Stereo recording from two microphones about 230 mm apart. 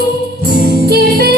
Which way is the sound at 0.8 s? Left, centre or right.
Right.